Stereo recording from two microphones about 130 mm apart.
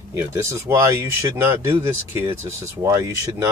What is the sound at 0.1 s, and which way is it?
Speech, 20° right (ahead or behind).